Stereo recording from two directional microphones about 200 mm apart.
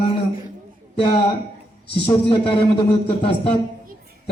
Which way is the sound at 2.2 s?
25° left (ahead or behind).